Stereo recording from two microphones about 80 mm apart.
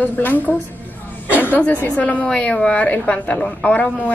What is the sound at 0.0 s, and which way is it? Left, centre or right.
A woman's voice, left.